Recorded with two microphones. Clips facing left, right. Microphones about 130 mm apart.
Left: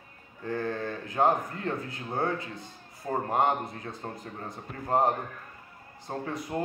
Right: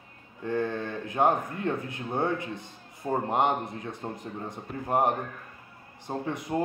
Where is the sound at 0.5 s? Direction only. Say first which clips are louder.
Right 2 dB; 20° right (ahead or behind).